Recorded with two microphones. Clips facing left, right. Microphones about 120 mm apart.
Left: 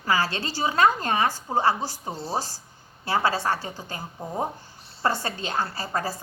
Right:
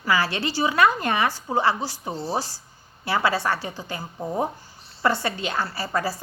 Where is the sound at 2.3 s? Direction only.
45° left (ahead or behind).